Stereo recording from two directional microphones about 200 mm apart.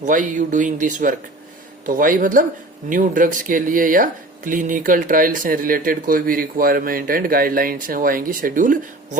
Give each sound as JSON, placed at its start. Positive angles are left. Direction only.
{"t": 0.0, "sound": "speech", "side_deg": -40}